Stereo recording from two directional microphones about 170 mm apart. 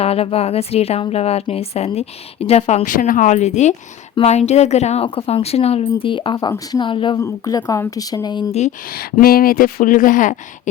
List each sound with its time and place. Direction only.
0.0 s a woman's voice: 35° left (ahead or behind)
8.9 s speech: 60° left (ahead or behind)